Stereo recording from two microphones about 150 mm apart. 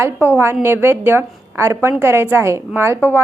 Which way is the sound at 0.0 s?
15° right (ahead or behind).